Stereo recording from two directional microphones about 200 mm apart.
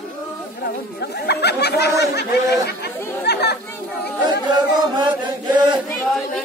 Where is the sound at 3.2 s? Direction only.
55° left (ahead or behind).